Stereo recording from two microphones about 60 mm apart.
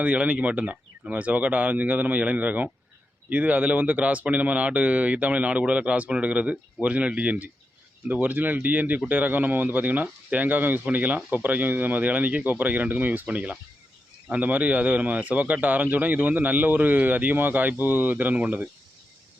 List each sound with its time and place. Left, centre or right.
0.0 s a man's voice: right